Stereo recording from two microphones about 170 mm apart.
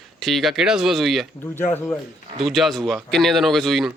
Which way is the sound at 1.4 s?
10° left (ahead or behind).